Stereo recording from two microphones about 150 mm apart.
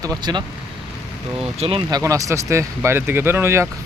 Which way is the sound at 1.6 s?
40° right (ahead or behind).